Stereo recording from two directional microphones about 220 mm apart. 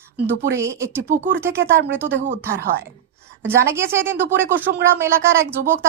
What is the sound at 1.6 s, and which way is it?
Speech, 55° right (ahead or behind).